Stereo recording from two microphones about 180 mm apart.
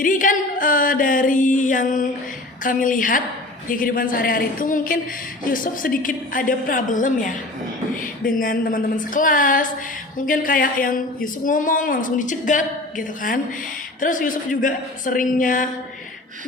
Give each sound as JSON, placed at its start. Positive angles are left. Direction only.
{"t": 0.0, "sound": "speech", "side_deg": 50}